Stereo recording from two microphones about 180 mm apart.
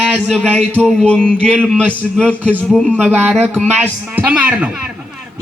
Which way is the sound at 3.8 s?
10° right (ahead or behind).